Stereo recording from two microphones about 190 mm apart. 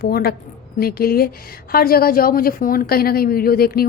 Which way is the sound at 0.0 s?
50° left (ahead or behind).